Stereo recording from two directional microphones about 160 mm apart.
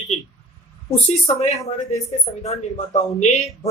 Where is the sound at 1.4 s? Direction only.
40° left (ahead or behind).